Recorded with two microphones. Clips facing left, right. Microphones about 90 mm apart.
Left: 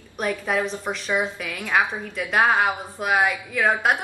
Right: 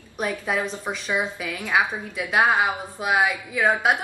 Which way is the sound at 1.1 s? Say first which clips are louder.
Left 1 dB; 15° right (ahead or behind).